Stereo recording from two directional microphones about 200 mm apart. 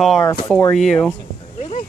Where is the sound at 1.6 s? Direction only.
35° left (ahead or behind).